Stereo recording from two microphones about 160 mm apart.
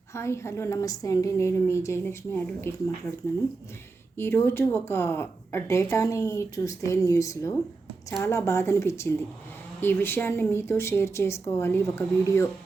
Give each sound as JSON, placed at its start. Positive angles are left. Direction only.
{"t": 0.1, "sound": "speech", "side_deg": 15}
{"t": 4.2, "sound": "speech", "side_deg": 15}